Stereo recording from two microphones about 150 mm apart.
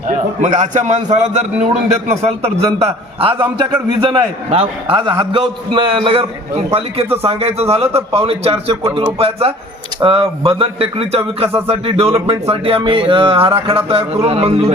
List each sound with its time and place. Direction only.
0.1 s a man's voice: 55° right (ahead or behind)